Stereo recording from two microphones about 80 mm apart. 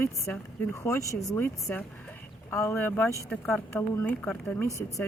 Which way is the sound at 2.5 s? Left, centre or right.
Left.